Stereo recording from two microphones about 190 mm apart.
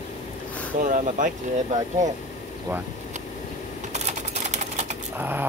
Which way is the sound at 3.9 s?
40° right (ahead or behind).